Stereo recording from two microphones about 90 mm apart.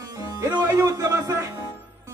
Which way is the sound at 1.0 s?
35° right (ahead or behind).